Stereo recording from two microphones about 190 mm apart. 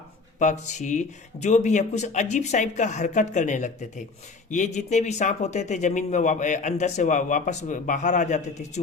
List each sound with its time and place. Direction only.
0.3 s speech: 40° left (ahead or behind)